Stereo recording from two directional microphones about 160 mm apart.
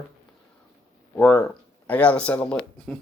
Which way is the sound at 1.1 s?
10° left (ahead or behind).